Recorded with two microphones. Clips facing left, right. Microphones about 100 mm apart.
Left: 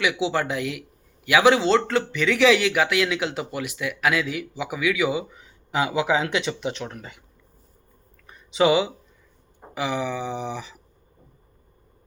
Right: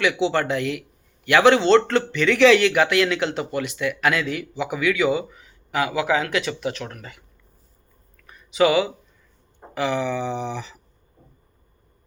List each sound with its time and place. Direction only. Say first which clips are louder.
0.0 s speech: right 3 dB; 10° left (ahead or behind)
5.3 s speech: even; 25° left (ahead or behind)
8.3 s a sound: right 1 dB; 25° left (ahead or behind)
9.7 s speech: right 3 dB; 10° left (ahead or behind)